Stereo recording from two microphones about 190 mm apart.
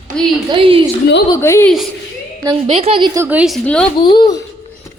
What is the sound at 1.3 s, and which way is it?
Speech, 15° left (ahead or behind).